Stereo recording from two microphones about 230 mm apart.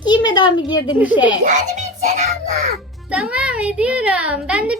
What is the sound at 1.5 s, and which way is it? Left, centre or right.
A child's voice, right.